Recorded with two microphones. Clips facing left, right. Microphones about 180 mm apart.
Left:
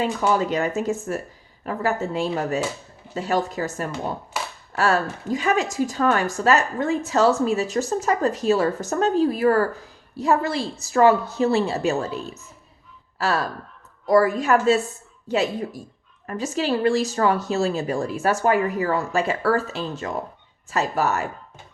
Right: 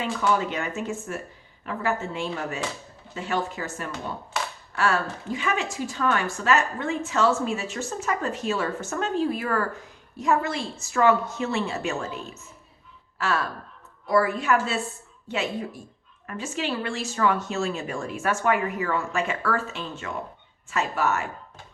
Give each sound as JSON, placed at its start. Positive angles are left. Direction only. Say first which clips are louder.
{"t": 0.0, "sound": "a woman's voice", "louder": "left 3 dB", "side_deg": 40}